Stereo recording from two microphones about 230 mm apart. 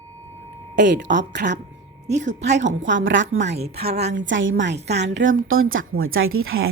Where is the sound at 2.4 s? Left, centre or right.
Right.